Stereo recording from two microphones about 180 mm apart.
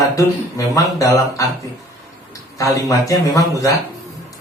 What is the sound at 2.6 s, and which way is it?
Speech, 20° left (ahead or behind).